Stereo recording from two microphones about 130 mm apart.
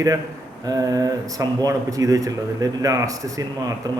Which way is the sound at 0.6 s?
30° right (ahead or behind).